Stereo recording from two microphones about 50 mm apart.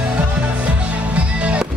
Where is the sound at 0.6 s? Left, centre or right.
Right.